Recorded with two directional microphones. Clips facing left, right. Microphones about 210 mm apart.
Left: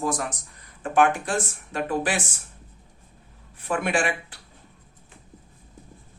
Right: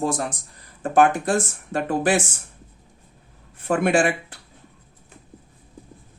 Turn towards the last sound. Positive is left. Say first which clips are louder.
# right 5 dB
turn(degrees=-45)  # may be behind; listen again after turning